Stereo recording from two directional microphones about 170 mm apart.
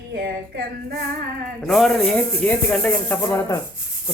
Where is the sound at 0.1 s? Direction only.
70° right (ahead or behind).